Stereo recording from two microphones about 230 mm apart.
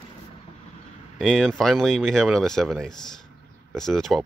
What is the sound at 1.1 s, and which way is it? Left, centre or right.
Speech, centre.